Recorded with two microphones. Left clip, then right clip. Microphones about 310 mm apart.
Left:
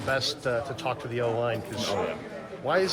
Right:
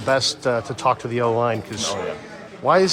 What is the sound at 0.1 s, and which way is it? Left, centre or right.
A man's voice, right.